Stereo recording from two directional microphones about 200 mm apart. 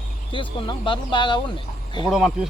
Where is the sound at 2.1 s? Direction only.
Centre (ahead or behind).